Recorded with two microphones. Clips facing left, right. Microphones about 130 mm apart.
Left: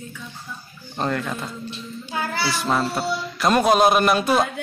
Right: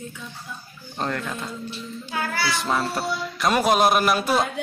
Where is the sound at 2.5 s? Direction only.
Centre (ahead or behind).